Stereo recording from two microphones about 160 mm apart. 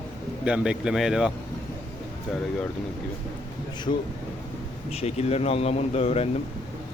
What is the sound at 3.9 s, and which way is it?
Speech, 40° left (ahead or behind).